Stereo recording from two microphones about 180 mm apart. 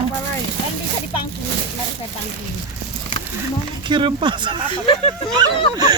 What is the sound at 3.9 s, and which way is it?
Speech, 25° right (ahead or behind).